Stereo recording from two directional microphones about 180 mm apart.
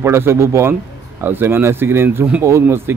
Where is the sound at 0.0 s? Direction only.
15° right (ahead or behind).